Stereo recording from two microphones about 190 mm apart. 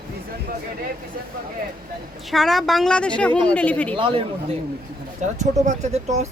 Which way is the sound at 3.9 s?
25° right (ahead or behind).